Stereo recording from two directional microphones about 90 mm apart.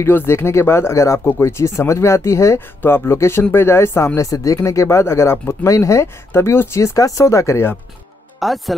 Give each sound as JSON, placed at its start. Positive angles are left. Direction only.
{"t": 0.0, "sound": "speech", "side_deg": 25}
{"t": 8.4, "sound": "speech", "side_deg": 0}